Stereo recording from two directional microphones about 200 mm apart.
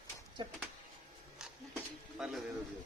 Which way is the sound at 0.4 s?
25° right (ahead or behind).